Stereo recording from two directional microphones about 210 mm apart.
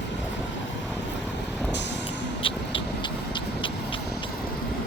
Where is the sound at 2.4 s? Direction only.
25° left (ahead or behind).